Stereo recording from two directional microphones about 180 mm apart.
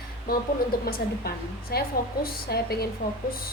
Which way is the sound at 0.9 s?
55° left (ahead or behind).